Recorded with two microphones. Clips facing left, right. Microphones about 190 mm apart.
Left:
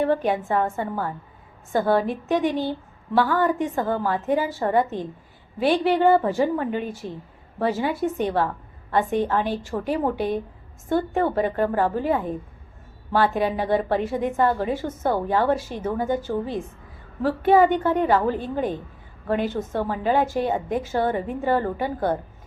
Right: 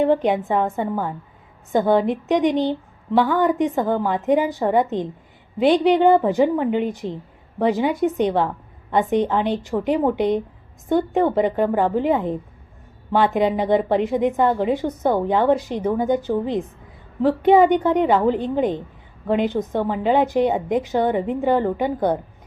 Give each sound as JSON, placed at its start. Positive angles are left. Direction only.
{"t": 0.0, "sound": "a woman's voice", "side_deg": -20}